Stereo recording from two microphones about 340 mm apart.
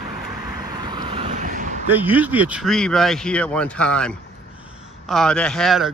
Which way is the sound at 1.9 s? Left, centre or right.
Centre.